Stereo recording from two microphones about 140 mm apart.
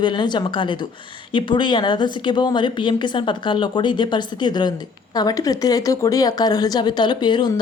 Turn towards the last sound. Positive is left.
turn(degrees=30)  # may be behind; listen again after turning